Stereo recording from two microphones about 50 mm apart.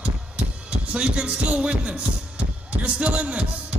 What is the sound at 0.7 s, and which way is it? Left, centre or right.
Speech, right.